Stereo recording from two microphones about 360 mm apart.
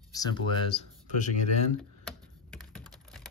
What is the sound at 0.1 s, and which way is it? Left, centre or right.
Speech, centre.